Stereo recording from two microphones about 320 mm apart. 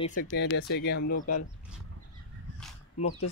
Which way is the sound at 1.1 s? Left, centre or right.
Left.